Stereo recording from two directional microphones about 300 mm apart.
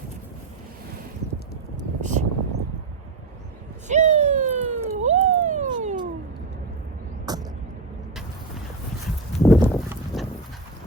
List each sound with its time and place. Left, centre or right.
1.7 s vehicle: right
3.8 s cat: right
7.3 s a sound: centre
9.4 s horse: centre